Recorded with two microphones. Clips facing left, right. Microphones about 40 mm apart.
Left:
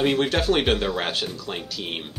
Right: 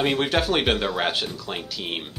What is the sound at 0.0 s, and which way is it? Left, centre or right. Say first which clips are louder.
Speech: left 1 dB; centre.